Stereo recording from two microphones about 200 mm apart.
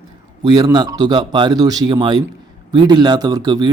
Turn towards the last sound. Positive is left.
turn(degrees=-20)  # may be behind; listen again after turning